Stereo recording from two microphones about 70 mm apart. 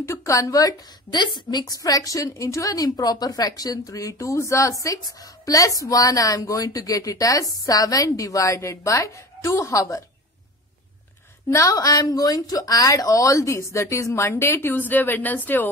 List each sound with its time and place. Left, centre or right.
0.0 s a woman's voice: left
4.8 s a woman's voice: left
11.6 s a woman's voice: left